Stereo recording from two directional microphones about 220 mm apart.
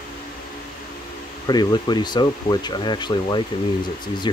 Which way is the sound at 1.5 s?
20° left (ahead or behind).